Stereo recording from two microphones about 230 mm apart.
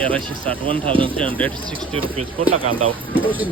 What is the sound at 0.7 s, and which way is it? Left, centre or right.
Speech, right.